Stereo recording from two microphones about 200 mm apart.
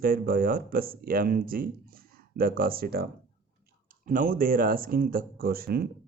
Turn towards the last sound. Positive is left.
turn(degrees=-50)  # may be behind; listen again after turning